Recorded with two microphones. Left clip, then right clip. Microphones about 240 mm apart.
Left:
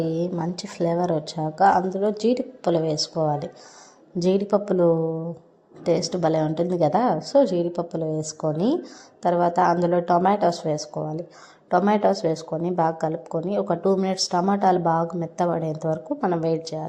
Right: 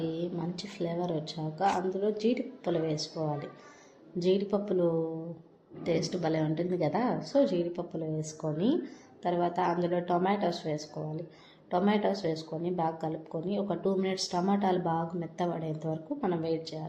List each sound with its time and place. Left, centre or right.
0.0 s a woman's voice: left